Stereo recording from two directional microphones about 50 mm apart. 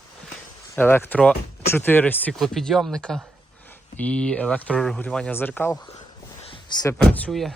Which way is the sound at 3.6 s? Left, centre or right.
Left.